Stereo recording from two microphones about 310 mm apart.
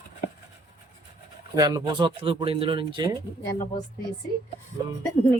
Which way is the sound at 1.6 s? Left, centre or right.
Centre.